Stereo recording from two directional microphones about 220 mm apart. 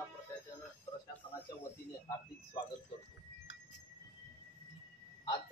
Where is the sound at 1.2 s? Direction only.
10° left (ahead or behind).